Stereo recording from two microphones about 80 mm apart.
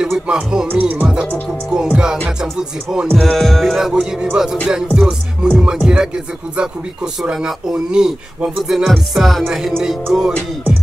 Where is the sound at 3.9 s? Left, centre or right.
Centre.